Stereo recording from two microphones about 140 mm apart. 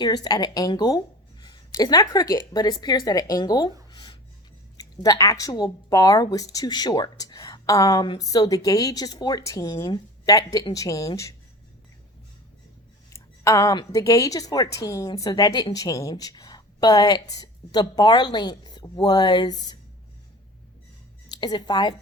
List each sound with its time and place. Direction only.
0.0 s a woman's voice: 30° left (ahead or behind)
3.9 s music: 30° left (ahead or behind)
4.8 s a woman's voice: 25° left (ahead or behind)
13.1 s a woman's voice: 20° left (ahead or behind)
21.2 s speech: 30° left (ahead or behind)